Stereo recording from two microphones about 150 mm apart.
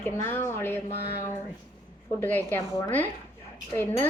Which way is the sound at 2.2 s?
10° left (ahead or behind).